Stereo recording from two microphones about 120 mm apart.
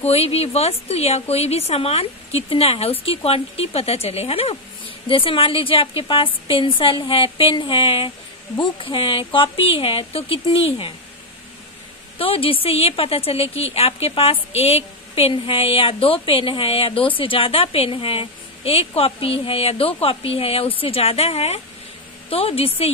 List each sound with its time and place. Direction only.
0.0 s a woman's voice: 60° left (ahead or behind)
12.2 s a woman's voice: 50° left (ahead or behind)